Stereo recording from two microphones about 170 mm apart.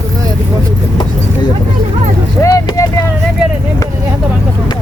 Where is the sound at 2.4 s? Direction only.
20° left (ahead or behind).